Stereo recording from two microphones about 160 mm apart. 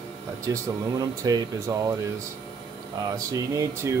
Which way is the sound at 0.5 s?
20° right (ahead or behind).